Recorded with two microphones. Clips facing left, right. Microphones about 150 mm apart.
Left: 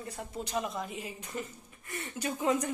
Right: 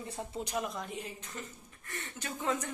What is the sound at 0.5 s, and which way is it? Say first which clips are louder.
A woman's voice: left 3 dB; centre (ahead or behind).